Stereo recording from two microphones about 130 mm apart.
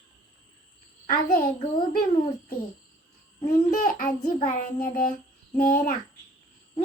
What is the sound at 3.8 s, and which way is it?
A child's voice, 90° left.